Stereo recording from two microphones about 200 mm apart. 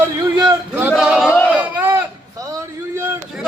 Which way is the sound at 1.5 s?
10° right (ahead or behind).